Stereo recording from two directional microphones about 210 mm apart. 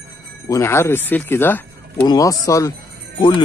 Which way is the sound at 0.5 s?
15° left (ahead or behind).